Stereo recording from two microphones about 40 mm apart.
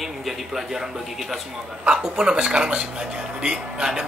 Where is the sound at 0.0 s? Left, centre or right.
Centre.